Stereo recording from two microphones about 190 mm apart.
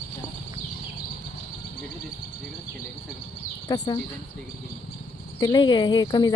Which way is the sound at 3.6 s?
20° left (ahead or behind).